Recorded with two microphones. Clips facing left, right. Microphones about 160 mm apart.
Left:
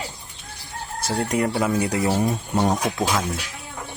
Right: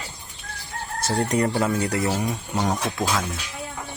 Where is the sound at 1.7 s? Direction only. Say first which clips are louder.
Left 2 dB; 10° left (ahead or behind).